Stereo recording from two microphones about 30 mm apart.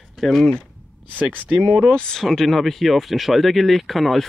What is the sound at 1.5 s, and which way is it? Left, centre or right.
Speech, right.